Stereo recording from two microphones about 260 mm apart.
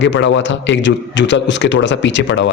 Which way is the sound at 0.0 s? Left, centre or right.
Left.